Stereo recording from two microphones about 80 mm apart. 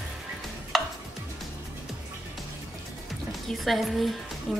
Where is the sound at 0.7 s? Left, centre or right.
Centre.